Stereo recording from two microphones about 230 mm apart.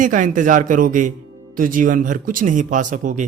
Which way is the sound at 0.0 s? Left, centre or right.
Right.